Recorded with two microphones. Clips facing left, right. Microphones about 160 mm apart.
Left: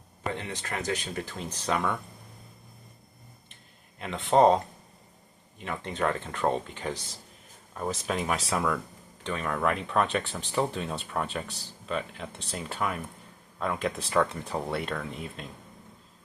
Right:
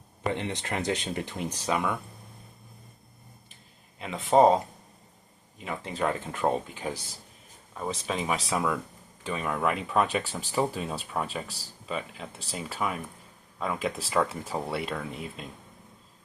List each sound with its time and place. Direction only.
0.3 s speech: 25° right (ahead or behind); by 2.0 s 5° right (ahead or behind)
3.9 s speech: centre (ahead or behind)